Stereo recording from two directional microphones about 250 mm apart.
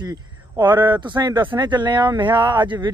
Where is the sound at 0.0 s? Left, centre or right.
Centre.